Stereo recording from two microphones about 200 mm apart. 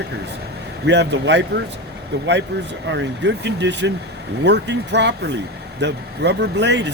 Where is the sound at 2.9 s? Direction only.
60° right (ahead or behind).